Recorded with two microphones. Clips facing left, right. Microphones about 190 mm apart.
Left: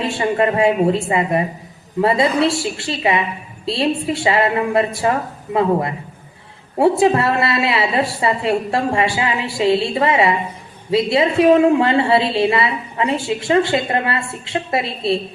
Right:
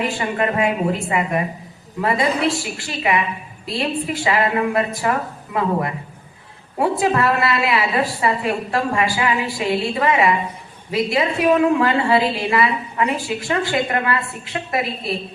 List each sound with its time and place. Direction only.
0.0 s a woman's voice: 30° left (ahead or behind)
6.7 s a woman's voice: 30° left (ahead or behind)